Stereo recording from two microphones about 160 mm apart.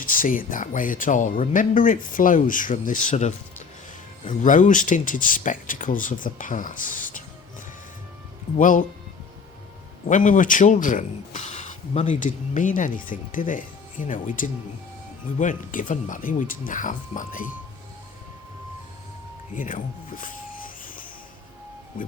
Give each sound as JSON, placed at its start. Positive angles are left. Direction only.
{"t": 0.0, "sound": "speech", "side_deg": 60}
{"t": 8.5, "sound": "speech", "side_deg": 55}
{"t": 10.1, "sound": "speech", "side_deg": 55}
{"t": 19.5, "sound": "speech", "side_deg": 55}